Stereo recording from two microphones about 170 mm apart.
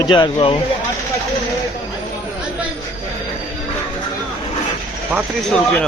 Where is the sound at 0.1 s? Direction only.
30° left (ahead or behind).